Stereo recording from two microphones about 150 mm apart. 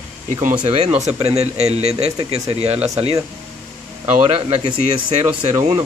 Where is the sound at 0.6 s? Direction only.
45° right (ahead or behind).